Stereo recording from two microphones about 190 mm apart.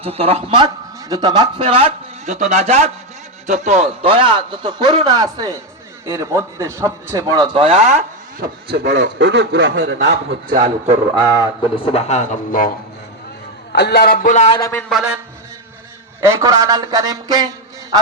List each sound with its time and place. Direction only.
0.0 s a man's voice: 30° right (ahead or behind)
8.7 s a man's voice: 60° right (ahead or behind)
11.9 s speech: 35° left (ahead or behind)
13.7 s a man's voice: 60° left (ahead or behind); by 14.5 s 40° left (ahead or behind)
14.7 s speech: 5° left (ahead or behind)
16.2 s a man's voice: 15° right (ahead or behind)